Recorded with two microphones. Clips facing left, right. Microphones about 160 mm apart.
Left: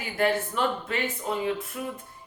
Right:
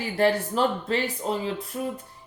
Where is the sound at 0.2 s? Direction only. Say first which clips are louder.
Right 3 dB; 35° right (ahead or behind).